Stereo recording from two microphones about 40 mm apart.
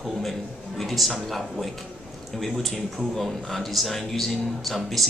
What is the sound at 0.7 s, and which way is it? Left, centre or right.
Speech, centre.